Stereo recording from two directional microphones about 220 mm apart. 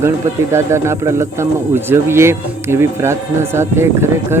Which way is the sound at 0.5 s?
10° right (ahead or behind).